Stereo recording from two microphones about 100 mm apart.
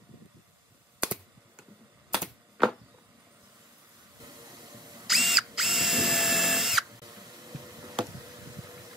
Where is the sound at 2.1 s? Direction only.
5° right (ahead or behind).